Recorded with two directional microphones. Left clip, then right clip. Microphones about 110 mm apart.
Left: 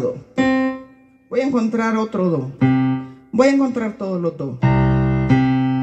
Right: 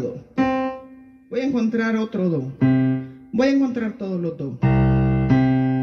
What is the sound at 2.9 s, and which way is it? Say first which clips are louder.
Music: left 5 dB; 20° right (ahead or behind).